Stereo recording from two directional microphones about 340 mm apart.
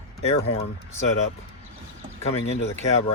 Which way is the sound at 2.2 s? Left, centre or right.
Centre.